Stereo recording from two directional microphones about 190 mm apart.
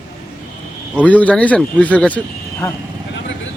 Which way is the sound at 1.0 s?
5° left (ahead or behind).